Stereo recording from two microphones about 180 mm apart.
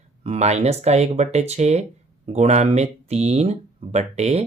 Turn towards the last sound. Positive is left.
turn(degrees=-40)  # may be behind; listen again after turning